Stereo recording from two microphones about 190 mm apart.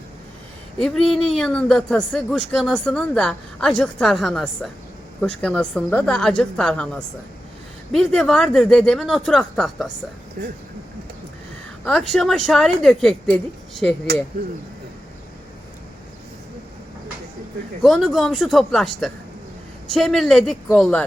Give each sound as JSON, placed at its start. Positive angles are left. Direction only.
{"t": 0.8, "sound": "speech", "side_deg": 0}
{"t": 10.4, "sound": "speech", "side_deg": -50}
{"t": 11.9, "sound": "speech", "side_deg": 0}
{"t": 17.8, "sound": "speech", "side_deg": 0}